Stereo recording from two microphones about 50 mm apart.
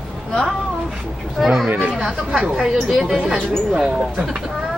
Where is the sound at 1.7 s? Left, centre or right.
Right.